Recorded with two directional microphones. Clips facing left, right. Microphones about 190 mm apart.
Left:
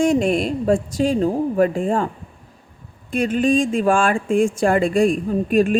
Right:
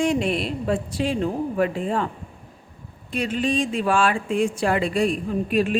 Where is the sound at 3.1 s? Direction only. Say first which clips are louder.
Left 6 dB; 50° left (ahead or behind).